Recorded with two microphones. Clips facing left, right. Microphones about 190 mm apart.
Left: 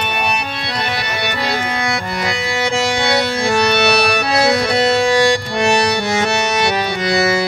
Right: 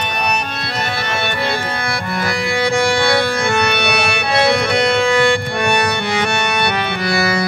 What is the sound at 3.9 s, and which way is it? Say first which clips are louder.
Music: left 2 dB; 35° left (ahead or behind).